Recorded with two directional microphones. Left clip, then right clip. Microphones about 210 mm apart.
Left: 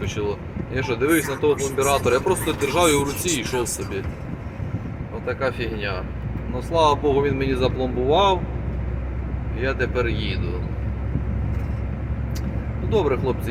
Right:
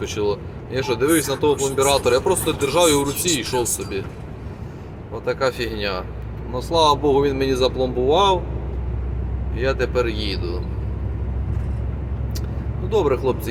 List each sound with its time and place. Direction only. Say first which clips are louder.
0.0 s speech: right 4 dB; 15° right (ahead or behind)
5.2 s speech: right 3 dB; 25° right (ahead or behind)
9.6 s speech: right 3 dB; 15° right (ahead or behind)
12.9 s speech: right 2 dB; 10° right (ahead or behind)